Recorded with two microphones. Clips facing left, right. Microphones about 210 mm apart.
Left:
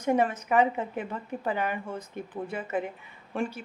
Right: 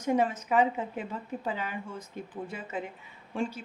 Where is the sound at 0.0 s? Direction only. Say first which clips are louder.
Left 2 dB; 60° left (ahead or behind).